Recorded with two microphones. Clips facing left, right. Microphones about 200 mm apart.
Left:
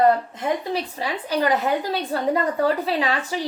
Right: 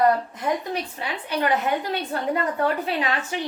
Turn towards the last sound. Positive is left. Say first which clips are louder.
# left 2 dB
turn(degrees=35)  # may be behind; listen again after turning